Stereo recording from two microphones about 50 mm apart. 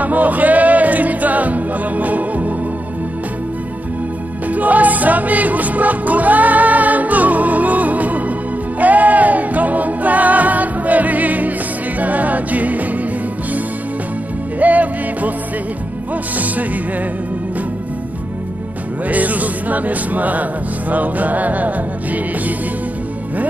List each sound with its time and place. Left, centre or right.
0.0 s music: right
4.5 s music: right
14.6 s music: right
19.0 s music: right